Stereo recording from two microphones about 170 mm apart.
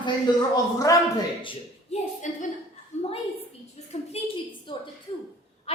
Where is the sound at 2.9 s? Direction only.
45° left (ahead or behind).